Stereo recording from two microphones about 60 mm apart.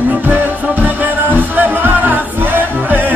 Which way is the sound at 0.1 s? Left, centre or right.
Right.